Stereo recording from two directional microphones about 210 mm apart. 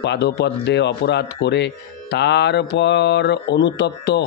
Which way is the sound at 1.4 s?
55° left (ahead or behind).